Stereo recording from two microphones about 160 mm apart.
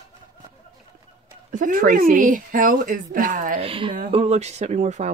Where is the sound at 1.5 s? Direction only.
55° right (ahead or behind).